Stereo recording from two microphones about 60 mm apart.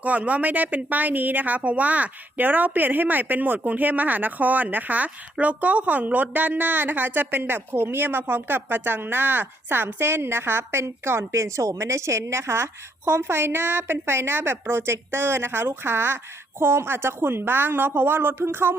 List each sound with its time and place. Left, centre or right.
0.0 s speech: right